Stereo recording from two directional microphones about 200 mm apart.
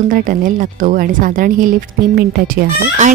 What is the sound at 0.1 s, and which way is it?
Speech, 45° right (ahead or behind).